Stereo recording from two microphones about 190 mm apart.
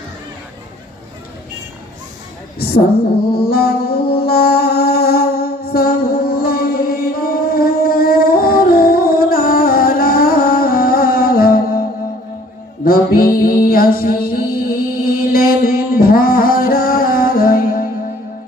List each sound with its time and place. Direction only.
3.3 s music: 55° left (ahead or behind)
12.8 s music: 50° left (ahead or behind)
13.7 s a sound: 50° left (ahead or behind)